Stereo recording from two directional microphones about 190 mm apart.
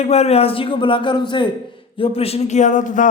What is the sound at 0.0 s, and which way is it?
A man's voice, 35° left (ahead or behind).